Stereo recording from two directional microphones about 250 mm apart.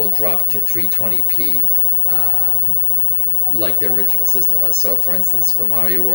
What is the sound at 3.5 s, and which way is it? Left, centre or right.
Speech, right.